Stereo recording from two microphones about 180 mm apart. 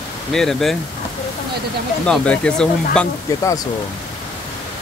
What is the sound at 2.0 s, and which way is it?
Speech, 5° left (ahead or behind).